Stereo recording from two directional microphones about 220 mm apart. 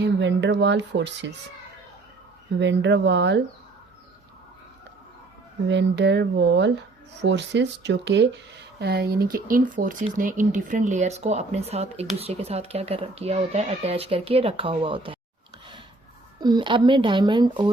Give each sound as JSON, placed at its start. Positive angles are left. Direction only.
{"t": 0.0, "sound": "speech", "side_deg": -55}
{"t": 2.6, "sound": "speech", "side_deg": -55}
{"t": 5.6, "sound": "speech", "side_deg": -50}
{"t": 16.4, "sound": "speech", "side_deg": -20}